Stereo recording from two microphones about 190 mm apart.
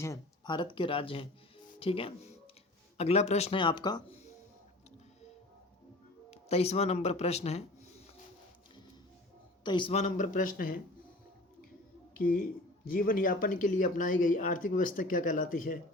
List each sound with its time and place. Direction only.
0.0 s speech: 20° left (ahead or behind)
6.3 s speech: 35° left (ahead or behind)
9.6 s speech: 25° left (ahead or behind); by 10.8 s 45° left (ahead or behind)
12.1 s speech: 50° left (ahead or behind)